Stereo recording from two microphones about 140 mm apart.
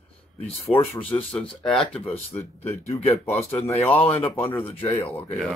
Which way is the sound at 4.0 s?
45° left (ahead or behind).